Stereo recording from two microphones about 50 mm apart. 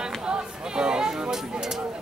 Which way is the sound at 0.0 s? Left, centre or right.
Centre.